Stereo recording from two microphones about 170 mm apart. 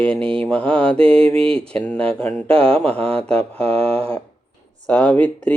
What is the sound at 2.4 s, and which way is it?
Speech, 35° right (ahead or behind).